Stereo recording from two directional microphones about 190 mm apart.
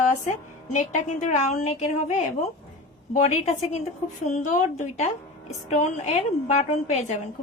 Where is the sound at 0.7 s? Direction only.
40° left (ahead or behind).